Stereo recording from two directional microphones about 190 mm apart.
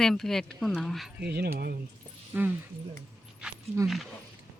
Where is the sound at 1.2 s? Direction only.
55° right (ahead or behind).